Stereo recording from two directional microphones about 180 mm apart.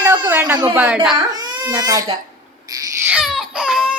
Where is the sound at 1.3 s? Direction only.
20° right (ahead or behind).